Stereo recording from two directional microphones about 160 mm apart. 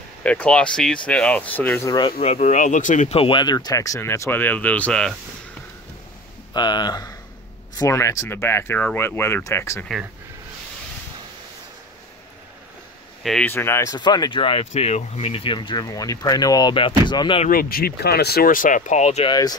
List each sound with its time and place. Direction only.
0.2 s speech: 10° left (ahead or behind)
2.0 s speech: 30° left (ahead or behind); by 3.2 s 50° left (ahead or behind)
3.2 s speech: 30° left (ahead or behind); by 5.1 s 5° left (ahead or behind)
6.5 s speech: 25° left (ahead or behind)
13.2 s speech: 5° left (ahead or behind); by 14.7 s 30° left (ahead or behind)
14.7 s speech: 45° left (ahead or behind); by 17.4 s 30° left (ahead or behind)
17.5 s speech: 65° left (ahead or behind); by 19.3 s 40° left (ahead or behind)